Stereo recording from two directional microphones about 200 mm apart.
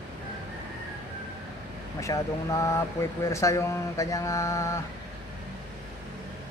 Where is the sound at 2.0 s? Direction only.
15° left (ahead or behind).